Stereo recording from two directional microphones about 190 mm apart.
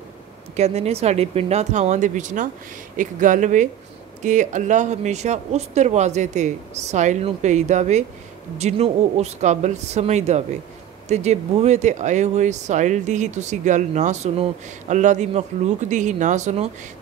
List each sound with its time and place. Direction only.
0.6 s speech: 35° right (ahead or behind)